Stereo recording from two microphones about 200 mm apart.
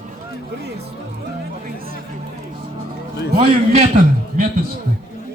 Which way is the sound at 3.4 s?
35° right (ahead or behind).